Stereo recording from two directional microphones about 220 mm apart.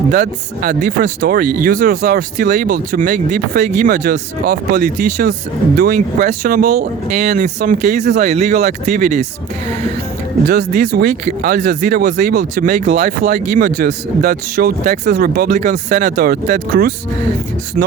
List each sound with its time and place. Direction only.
0.1 s speech: 45° right (ahead or behind)
10.5 s speech: 40° right (ahead or behind)